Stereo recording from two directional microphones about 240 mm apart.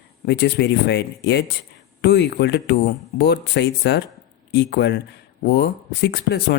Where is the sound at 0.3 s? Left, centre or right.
Left.